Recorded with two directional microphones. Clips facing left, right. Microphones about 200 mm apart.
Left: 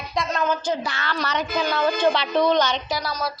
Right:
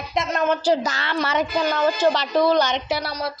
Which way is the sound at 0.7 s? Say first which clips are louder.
Right 5 dB; 40° right (ahead or behind).